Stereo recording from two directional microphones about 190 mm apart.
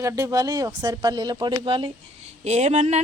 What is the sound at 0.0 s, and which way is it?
A woman's voice, 15° right (ahead or behind).